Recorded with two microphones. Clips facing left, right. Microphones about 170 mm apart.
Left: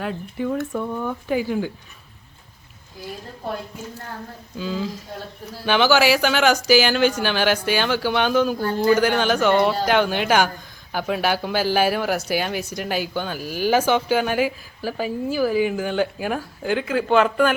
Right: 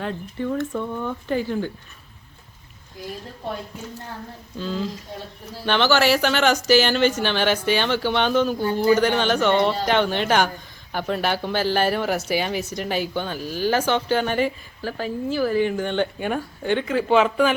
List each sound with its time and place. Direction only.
0.0 s speech: 5° left (ahead or behind)
4.5 s speech: 5° left (ahead or behind)
8.6 s speech: 15° right (ahead or behind)
9.0 s speech: centre (ahead or behind)